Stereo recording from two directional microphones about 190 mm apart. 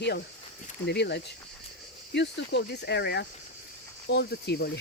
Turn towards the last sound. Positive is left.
turn(degrees=60)  # may be behind; listen again after turning